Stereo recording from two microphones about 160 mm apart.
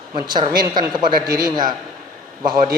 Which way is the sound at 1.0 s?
25° right (ahead or behind).